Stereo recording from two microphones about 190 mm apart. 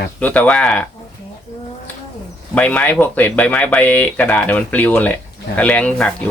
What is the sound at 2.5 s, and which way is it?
Speech, 5° left (ahead or behind).